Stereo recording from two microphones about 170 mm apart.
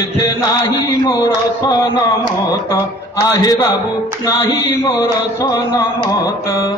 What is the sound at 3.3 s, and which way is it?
Music, 20° left (ahead or behind).